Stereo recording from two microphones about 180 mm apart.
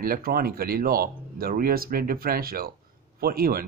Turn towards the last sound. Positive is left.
turn(degrees=-55)  # may be behind; listen again after turning